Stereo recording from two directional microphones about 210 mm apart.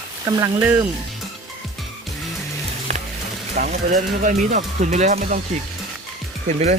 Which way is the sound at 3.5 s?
40° right (ahead or behind).